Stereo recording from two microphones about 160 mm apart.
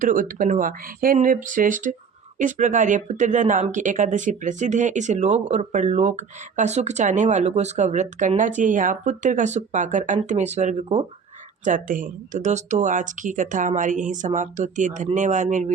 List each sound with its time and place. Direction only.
0.0 s speech: 55° right (ahead or behind)